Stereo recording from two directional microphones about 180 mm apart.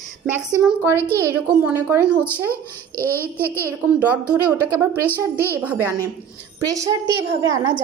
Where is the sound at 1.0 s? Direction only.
10° left (ahead or behind).